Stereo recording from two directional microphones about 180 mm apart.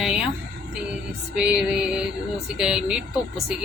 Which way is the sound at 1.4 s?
5° right (ahead or behind).